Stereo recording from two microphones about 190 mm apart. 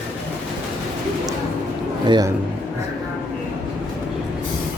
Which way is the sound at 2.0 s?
25° right (ahead or behind).